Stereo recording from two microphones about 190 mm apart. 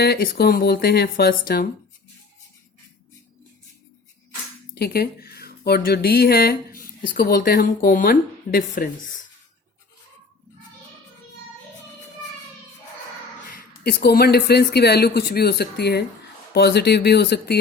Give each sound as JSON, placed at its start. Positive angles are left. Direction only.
{"t": 0.0, "sound": "speech", "side_deg": 55}
{"t": 4.7, "sound": "speech", "side_deg": 55}
{"t": 13.8, "sound": "speech", "side_deg": 55}